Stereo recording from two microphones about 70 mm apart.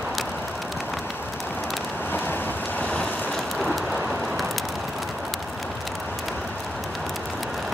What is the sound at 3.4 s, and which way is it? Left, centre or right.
Rain on surface, centre.